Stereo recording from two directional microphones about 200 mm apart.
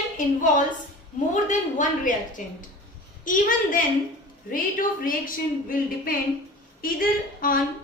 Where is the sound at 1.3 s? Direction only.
40° left (ahead or behind).